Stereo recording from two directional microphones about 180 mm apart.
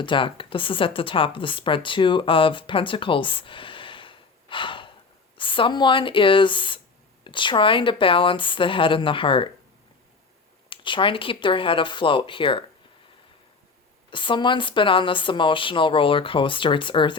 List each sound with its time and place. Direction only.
0.0 s speech: 30° left (ahead or behind)
10.7 s speech: 30° left (ahead or behind)
14.1 s speech: 25° left (ahead or behind)